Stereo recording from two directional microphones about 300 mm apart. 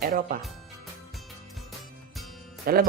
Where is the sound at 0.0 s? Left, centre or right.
Right.